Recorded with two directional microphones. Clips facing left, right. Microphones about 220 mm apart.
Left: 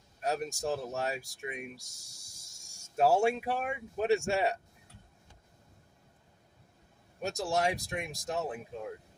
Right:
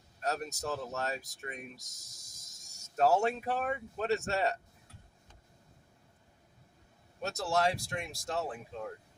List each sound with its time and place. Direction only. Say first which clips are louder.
0.2 s speech: left 3 dB; 15° left (ahead or behind)
7.2 s speech: even; 15° left (ahead or behind)